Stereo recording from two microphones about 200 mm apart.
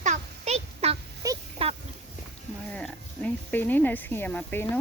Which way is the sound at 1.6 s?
30° right (ahead or behind).